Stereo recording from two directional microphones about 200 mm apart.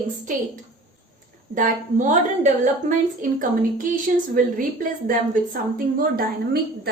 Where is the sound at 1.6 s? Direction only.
40° right (ahead or behind).